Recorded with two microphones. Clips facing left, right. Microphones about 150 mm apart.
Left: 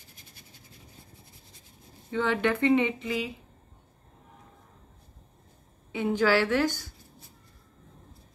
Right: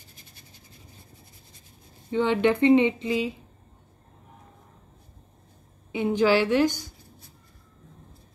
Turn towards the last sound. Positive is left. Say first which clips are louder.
# right 4 dB
turn(degrees=-15)  # may be behind; listen again after turning